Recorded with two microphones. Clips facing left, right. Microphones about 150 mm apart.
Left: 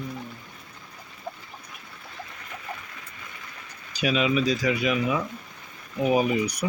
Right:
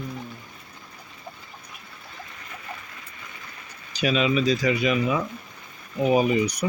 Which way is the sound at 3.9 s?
5° left (ahead or behind).